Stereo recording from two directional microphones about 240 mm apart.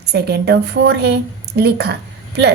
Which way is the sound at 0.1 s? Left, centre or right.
Right.